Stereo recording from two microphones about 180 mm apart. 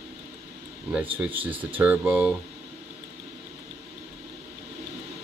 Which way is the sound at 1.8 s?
10° right (ahead or behind).